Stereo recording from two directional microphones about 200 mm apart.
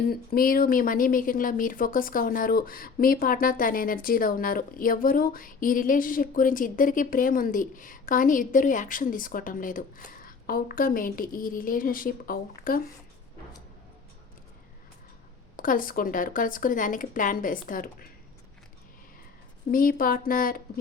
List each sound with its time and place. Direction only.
0.1 s speech: 45° left (ahead or behind)
15.5 s speech: 45° left (ahead or behind)
19.7 s speech: 45° left (ahead or behind)